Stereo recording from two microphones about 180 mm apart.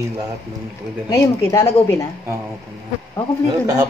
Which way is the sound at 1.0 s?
15° left (ahead or behind).